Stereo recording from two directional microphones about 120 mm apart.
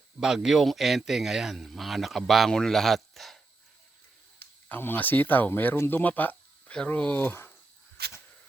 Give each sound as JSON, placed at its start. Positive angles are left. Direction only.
{"t": 0.2, "sound": "speech", "side_deg": -5}
{"t": 4.7, "sound": "speech", "side_deg": 15}